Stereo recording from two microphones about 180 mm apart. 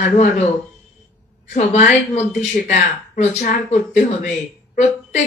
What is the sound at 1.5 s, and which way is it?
A woman's voice, 40° left (ahead or behind).